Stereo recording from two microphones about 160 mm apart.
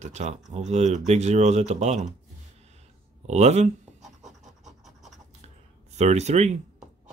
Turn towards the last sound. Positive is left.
turn(degrees=-45)  # may be behind; listen again after turning